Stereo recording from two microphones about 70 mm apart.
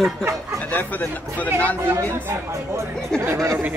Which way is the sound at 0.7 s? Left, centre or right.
Left.